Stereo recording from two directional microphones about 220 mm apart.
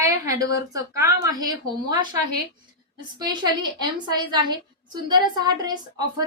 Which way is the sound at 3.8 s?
20° right (ahead or behind).